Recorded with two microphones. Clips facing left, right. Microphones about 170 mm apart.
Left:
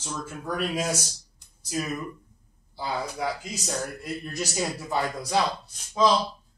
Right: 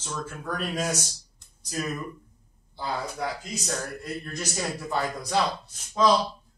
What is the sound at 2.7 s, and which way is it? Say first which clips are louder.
A woman's voice: left 1 dB; 5° left (ahead or behind).